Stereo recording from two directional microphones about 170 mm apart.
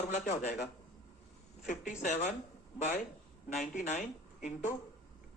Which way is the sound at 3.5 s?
50° left (ahead or behind).